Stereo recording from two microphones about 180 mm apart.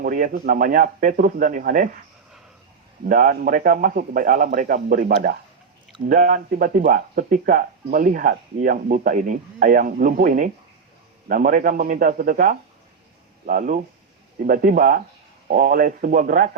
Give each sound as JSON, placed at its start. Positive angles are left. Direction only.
{"t": 0.0, "sound": "speech", "side_deg": -50}
{"t": 3.1, "sound": "speech", "side_deg": -45}